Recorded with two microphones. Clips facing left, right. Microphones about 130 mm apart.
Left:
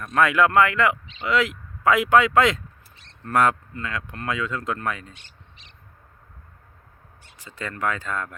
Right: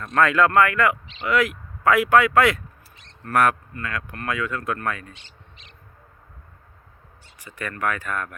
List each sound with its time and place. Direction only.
0.0 s speech: 15° left (ahead or behind)
7.6 s speech: 20° left (ahead or behind)